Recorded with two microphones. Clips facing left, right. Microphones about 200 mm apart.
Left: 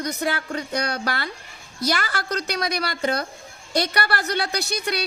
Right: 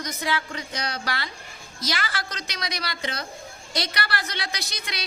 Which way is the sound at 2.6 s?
55° left (ahead or behind).